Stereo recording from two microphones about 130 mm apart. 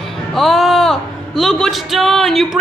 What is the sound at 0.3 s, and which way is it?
A woman's voice, centre (ahead or behind).